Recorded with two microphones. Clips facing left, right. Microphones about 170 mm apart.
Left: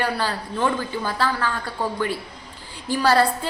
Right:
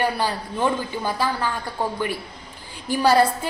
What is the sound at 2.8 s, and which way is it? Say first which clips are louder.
Speech: right 1 dB; 15° right (ahead or behind).